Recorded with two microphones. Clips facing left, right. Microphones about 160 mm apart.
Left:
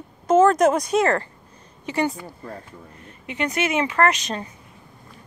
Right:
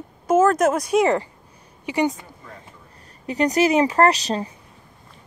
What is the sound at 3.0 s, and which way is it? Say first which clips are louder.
Speech: right 6 dB; 40° right (ahead or behind).